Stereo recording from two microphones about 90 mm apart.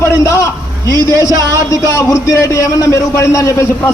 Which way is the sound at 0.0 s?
35° left (ahead or behind).